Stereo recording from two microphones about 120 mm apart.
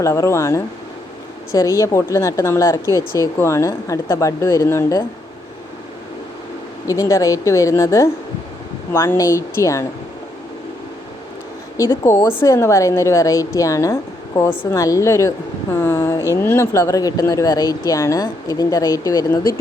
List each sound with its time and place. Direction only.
0.0 s speech: 25° left (ahead or behind)
6.8 s speech: 25° left (ahead or behind)
11.8 s speech: 20° left (ahead or behind)